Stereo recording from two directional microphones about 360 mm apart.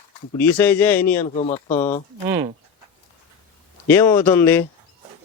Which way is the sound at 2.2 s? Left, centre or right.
Centre.